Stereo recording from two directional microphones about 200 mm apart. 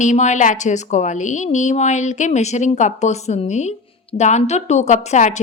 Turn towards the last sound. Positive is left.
turn(degrees=35)  # may be behind; listen again after turning